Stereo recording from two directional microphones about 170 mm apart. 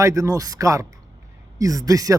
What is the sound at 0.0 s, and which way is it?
A man's voice, 20° right (ahead or behind).